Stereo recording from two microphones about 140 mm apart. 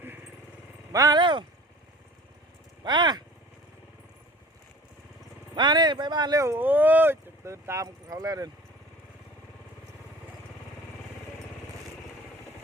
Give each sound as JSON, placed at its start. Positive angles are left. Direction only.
{"t": 0.9, "sound": "speech", "side_deg": -30}
{"t": 2.8, "sound": "speech", "side_deg": -30}
{"t": 5.5, "sound": "speech", "side_deg": -35}